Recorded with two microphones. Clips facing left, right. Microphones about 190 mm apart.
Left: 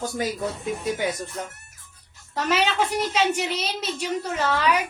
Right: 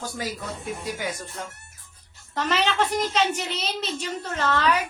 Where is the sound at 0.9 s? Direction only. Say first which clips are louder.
Left 6 dB; 25° left (ahead or behind).